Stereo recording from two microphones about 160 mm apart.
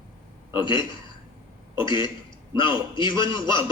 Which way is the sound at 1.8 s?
30° left (ahead or behind).